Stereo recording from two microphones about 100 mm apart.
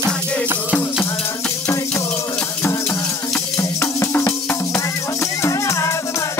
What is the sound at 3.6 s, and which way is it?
Music, 25° left (ahead or behind).